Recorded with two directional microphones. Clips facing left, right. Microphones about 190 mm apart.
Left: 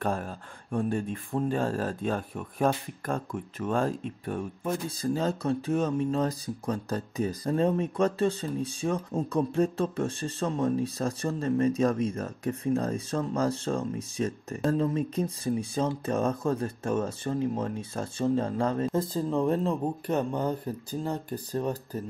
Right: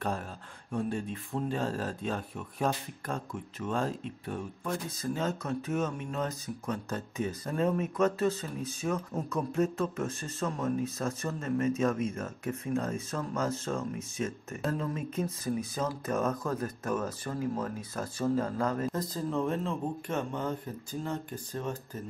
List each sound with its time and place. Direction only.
0.0 s speech: 50° left (ahead or behind)
4.6 s speech: 30° left (ahead or behind)